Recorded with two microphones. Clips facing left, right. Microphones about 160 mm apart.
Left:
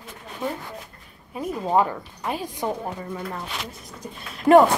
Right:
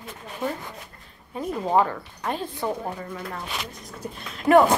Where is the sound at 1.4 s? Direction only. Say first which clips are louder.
Even; 5° left (ahead or behind).